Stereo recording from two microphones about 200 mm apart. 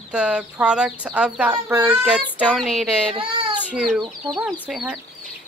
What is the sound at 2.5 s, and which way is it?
Speech, 5° left (ahead or behind).